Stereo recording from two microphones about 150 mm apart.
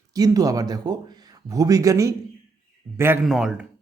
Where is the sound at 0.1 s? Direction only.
25° right (ahead or behind).